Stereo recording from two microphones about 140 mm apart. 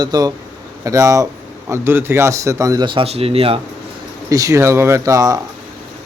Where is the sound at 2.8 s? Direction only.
40° right (ahead or behind).